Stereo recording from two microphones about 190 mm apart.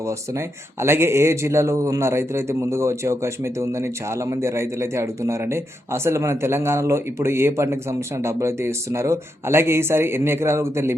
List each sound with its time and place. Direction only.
0.0 s speech: 15° right (ahead or behind)